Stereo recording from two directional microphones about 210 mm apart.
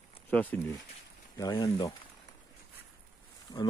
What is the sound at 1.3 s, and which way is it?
Speech, 20° left (ahead or behind).